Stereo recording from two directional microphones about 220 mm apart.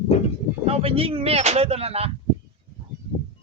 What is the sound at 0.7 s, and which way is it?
Speech, 25° right (ahead or behind).